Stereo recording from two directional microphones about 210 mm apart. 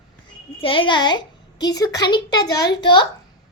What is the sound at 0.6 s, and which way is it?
A child's voice, 25° left (ahead or behind).